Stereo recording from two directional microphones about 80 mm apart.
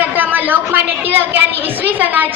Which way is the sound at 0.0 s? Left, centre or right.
Right.